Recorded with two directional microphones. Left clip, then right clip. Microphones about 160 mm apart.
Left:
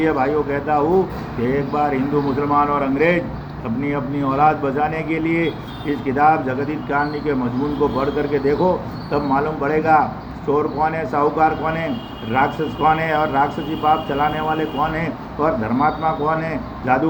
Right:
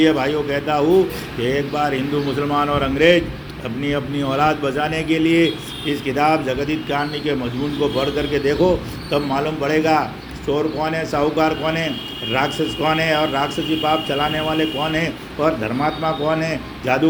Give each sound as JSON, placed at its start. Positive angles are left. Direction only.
{"t": 0.0, "sound": "a man's voice", "side_deg": -45}